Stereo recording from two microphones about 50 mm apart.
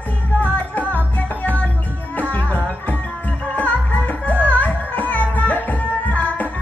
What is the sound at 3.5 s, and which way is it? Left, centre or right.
Music, left.